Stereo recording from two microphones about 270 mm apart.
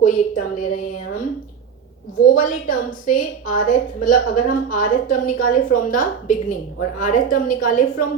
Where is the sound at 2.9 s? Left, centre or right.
Left.